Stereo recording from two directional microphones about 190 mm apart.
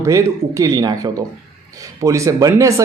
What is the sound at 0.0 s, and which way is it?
Speech, 15° right (ahead or behind).